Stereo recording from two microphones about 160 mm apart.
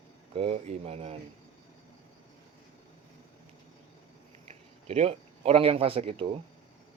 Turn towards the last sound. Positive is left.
turn(degrees=-35)  # may be behind; listen again after turning